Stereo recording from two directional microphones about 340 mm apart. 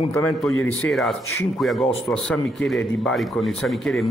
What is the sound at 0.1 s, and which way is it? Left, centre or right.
Speech, centre.